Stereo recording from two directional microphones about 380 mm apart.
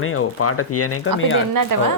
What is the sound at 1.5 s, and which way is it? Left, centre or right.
Speech, right.